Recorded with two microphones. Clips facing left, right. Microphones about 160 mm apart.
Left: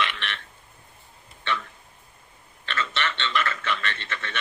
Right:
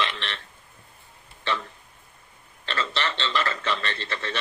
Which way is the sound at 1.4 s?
30° right (ahead or behind).